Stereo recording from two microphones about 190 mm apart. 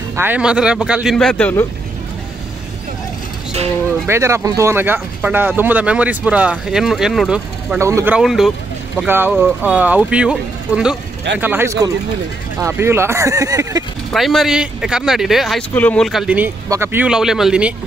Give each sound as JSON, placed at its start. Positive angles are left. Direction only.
{"t": 0.1, "sound": "speech", "side_deg": -10}
{"t": 4.1, "sound": "speech", "side_deg": -15}
{"t": 14.1, "sound": "speech", "side_deg": 0}